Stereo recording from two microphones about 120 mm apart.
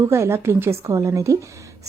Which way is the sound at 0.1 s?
20° right (ahead or behind).